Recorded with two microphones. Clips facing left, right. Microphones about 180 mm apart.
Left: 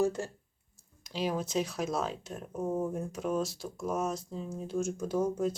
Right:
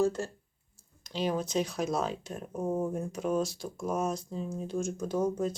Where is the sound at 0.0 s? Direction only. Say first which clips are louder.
Right 1 dB; 15° left (ahead or behind).